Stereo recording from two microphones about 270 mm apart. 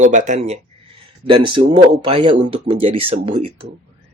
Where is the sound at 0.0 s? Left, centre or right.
Right.